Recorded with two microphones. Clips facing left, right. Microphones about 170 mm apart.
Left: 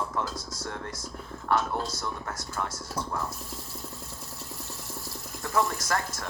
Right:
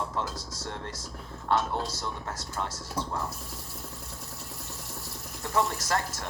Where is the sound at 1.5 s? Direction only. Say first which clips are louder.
Even; 20° right (ahead or behind).